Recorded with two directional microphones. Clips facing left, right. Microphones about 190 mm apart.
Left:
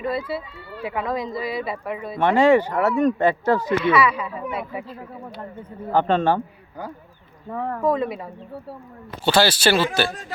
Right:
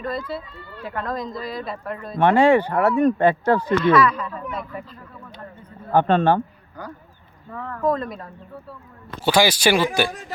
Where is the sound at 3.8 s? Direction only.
5° left (ahead or behind).